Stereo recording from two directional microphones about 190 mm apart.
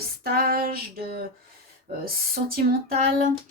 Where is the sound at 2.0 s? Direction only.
50° right (ahead or behind).